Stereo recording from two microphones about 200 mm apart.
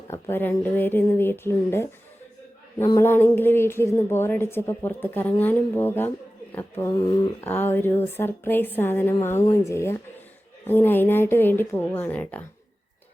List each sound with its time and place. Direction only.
0.1 s speech: 10° left (ahead or behind)
6.8 s speech: 20° left (ahead or behind)